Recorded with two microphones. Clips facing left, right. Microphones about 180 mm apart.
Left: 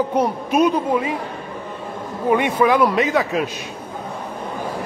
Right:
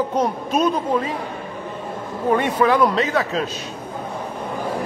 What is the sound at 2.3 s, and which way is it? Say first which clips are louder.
A man's voice: left 1 dB; 10° left (ahead or behind).